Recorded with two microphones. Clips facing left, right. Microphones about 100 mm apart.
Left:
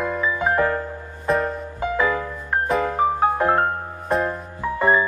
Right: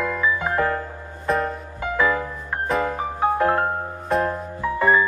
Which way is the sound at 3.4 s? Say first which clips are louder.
Even; 20° left (ahead or behind).